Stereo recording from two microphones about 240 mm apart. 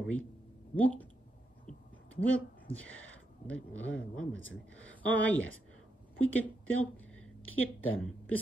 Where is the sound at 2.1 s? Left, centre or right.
Centre.